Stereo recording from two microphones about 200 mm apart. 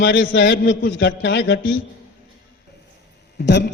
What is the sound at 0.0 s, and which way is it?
A man's voice, 70° left (ahead or behind).